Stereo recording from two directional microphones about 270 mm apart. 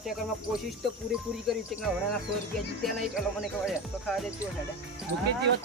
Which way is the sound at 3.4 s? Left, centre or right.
Centre.